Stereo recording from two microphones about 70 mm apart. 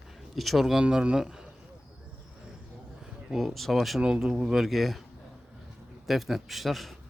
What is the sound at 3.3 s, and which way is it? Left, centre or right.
Speech, centre.